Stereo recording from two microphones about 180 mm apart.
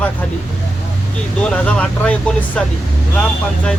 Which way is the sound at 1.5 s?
5° left (ahead or behind).